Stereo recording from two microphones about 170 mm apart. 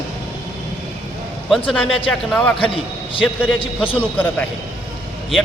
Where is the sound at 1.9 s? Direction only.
35° left (ahead or behind).